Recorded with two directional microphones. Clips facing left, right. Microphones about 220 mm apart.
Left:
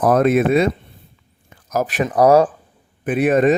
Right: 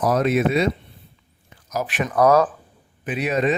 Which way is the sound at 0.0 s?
50° left (ahead or behind).